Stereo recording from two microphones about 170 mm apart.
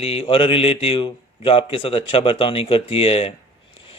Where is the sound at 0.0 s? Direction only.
35° left (ahead or behind).